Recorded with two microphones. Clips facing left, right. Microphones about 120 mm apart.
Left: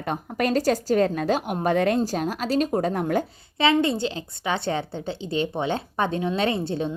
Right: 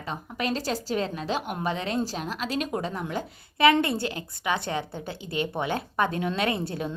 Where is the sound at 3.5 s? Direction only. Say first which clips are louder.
Even; 25° left (ahead or behind).